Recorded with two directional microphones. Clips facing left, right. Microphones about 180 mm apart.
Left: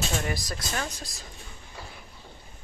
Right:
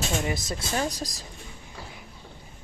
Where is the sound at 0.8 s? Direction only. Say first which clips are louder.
Right 7 dB; 35° right (ahead or behind).